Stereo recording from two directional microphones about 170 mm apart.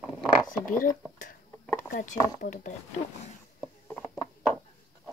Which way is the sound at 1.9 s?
50° left (ahead or behind).